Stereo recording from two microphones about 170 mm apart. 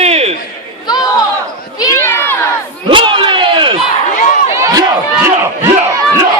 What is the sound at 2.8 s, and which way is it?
Battle cry, 30° right (ahead or behind).